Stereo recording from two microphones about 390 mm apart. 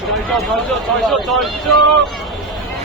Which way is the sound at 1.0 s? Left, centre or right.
Centre.